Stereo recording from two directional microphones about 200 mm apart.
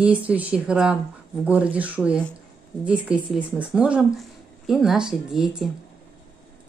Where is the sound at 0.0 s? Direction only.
5° right (ahead or behind).